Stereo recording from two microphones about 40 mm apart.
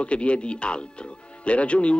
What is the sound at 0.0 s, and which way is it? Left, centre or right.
A man's voice, left.